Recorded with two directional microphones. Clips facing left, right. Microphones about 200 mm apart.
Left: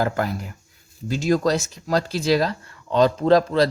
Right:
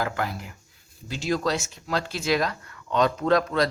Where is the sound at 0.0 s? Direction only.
40° left (ahead or behind).